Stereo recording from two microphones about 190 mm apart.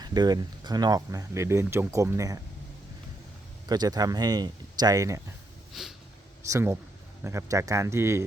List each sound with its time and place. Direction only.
0.0 s speech: 20° right (ahead or behind)
3.7 s speech: 20° right (ahead or behind)
5.7 s snort: centre (ahead or behind)
6.4 s speech: 15° right (ahead or behind)